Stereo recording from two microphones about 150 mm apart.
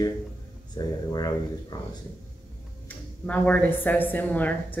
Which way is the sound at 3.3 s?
10° left (ahead or behind).